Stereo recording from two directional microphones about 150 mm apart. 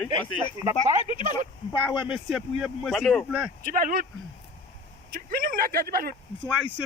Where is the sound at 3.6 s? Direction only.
65° right (ahead or behind).